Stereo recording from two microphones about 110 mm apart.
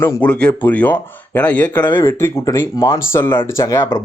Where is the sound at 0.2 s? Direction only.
10° left (ahead or behind).